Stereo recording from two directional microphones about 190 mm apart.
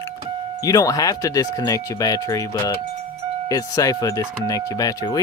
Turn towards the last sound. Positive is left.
turn(degrees=20)  # may be behind; listen again after turning